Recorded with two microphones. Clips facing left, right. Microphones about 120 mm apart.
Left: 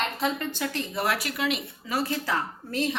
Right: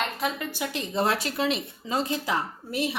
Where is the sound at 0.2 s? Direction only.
10° right (ahead or behind).